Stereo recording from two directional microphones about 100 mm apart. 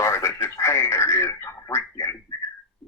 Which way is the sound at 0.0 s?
30° left (ahead or behind).